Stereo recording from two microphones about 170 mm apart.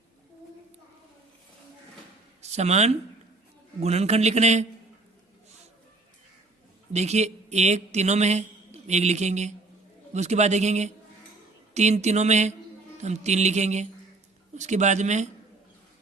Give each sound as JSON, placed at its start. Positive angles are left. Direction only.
{"t": 2.4, "sound": "speech", "side_deg": -40}
{"t": 6.9, "sound": "a man's voice", "side_deg": -40}